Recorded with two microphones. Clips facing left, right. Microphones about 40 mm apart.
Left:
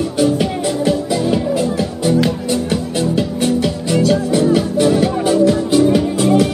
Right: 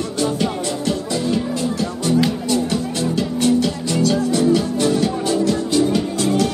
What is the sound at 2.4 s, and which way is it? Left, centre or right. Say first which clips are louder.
Music: left 1 dB; centre.